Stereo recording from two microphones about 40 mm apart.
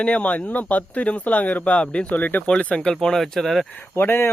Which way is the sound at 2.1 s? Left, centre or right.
Left.